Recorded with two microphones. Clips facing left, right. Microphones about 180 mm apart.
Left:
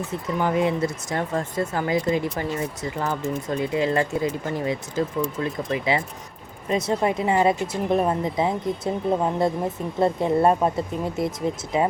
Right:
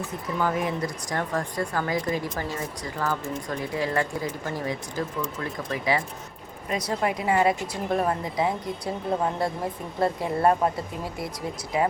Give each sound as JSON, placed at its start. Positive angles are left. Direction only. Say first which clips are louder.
{"t": 0.3, "sound": "speech", "louder": "left 4 dB", "side_deg": 20}